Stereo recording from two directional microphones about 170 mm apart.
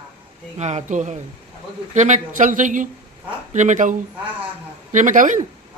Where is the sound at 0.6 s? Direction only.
45° right (ahead or behind).